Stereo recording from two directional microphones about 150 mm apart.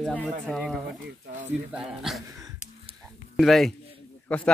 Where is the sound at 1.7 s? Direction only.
5° right (ahead or behind).